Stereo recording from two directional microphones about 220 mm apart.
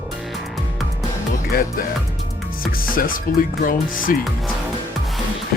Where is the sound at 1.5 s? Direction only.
40° left (ahead or behind).